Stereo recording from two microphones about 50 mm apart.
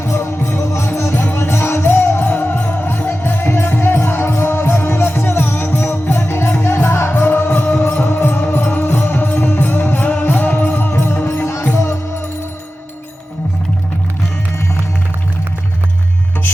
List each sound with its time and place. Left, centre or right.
0.0 s music: left
1.1 s music: left
1.4 s music: left
3.1 s music: left
9.6 s music: left
10.9 s music: left